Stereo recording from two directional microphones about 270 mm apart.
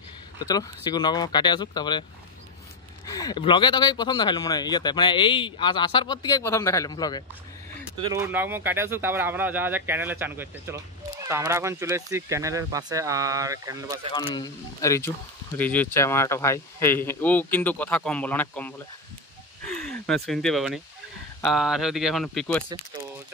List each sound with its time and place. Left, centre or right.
0.4 s speech: centre
3.1 s speech: centre
8.0 s speech: centre
14.1 s speech: centre
19.7 s a sound: centre
20.2 s speech: centre